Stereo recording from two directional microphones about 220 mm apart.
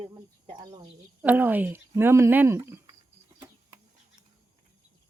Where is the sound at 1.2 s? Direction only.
10° right (ahead or behind).